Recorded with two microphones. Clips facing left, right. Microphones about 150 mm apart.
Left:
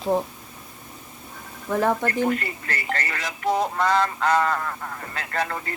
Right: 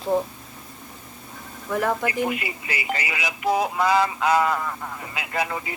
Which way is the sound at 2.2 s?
10° right (ahead or behind).